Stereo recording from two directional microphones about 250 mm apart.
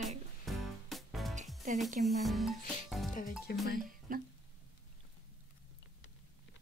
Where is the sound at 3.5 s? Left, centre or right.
Left.